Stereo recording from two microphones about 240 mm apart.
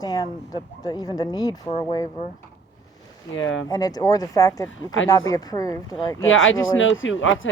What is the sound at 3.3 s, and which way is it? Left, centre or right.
Speech, left.